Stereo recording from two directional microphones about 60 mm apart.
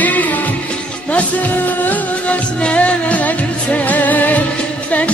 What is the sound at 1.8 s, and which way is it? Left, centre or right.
Music, left.